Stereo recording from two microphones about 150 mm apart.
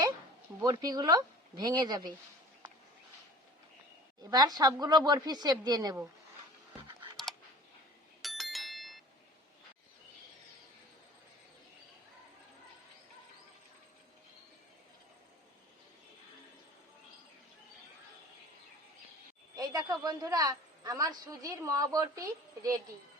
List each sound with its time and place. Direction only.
0.6 s speech: 25° right (ahead or behind)
4.2 s speech: 25° right (ahead or behind)
8.2 s a sound: centre (ahead or behind)
19.5 s a man's voice: 25° right (ahead or behind)